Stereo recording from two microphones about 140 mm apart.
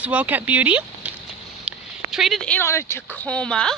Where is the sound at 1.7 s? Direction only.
Centre (ahead or behind).